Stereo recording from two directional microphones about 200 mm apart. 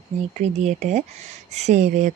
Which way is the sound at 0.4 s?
35° right (ahead or behind).